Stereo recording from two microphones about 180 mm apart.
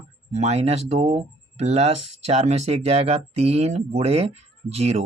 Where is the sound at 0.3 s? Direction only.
40° right (ahead or behind).